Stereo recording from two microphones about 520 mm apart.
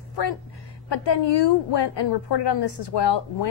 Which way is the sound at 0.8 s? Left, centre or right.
Left.